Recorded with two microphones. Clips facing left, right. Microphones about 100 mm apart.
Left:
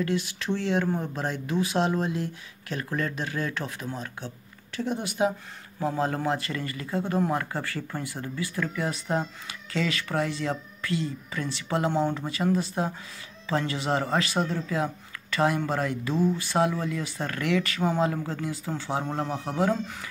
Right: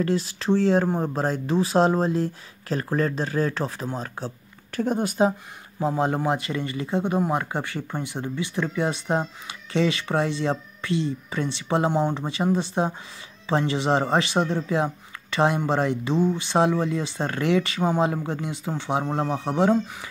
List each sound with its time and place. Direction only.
0.0 s speech: 35° right (ahead or behind)
4.7 s speech: 45° right (ahead or behind)
5.8 s speech: 20° right (ahead or behind)